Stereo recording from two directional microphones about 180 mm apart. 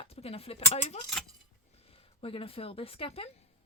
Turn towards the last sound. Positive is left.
turn(degrees=35)  # may be behind; listen again after turning